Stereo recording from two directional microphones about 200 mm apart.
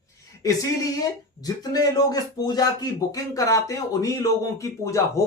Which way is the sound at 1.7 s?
20° left (ahead or behind).